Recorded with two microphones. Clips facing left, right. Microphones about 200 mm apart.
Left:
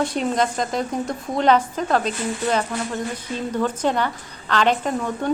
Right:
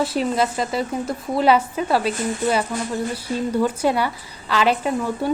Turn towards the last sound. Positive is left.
turn(degrees=-5)  # may be behind; listen again after turning